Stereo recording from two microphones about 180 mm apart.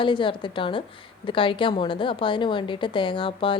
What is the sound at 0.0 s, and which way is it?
A woman's voice, 25° left (ahead or behind).